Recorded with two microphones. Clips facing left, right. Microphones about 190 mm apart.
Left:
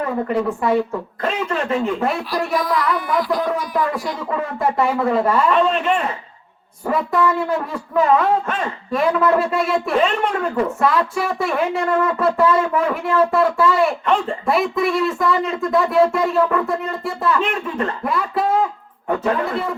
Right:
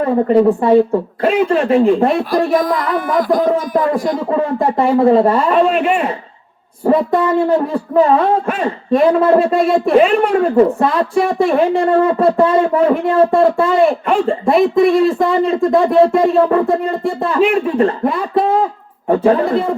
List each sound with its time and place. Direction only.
0.0 s speech: 35° right (ahead or behind)
2.5 s speech: 50° right (ahead or behind)
4.3 s speech: 30° right (ahead or behind)
5.6 s a man's voice: 10° right (ahead or behind)
6.8 s speech: 30° right (ahead or behind)